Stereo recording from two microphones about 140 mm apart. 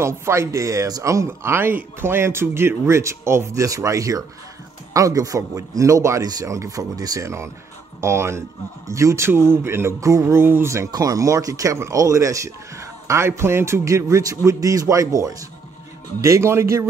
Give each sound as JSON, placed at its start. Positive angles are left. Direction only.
{"t": 0.0, "sound": "speech", "side_deg": -20}